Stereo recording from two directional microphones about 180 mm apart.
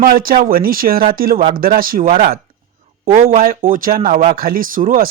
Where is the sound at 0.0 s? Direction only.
55° right (ahead or behind).